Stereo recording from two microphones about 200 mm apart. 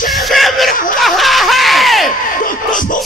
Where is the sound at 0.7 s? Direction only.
45° left (ahead or behind).